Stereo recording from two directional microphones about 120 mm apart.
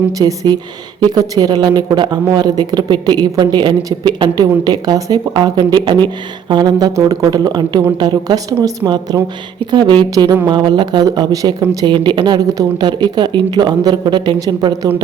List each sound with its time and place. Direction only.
0.2 s speech: 30° right (ahead or behind)